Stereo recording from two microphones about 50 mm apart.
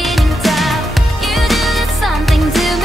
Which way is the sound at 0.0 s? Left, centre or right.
Centre.